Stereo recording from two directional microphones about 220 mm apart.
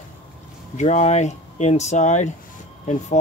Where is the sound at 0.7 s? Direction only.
30° left (ahead or behind).